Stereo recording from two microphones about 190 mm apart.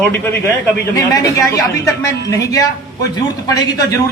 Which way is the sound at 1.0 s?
20° left (ahead or behind).